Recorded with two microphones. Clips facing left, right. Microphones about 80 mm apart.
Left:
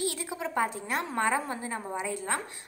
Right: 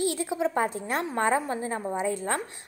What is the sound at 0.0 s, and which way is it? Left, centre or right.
A woman's voice, right.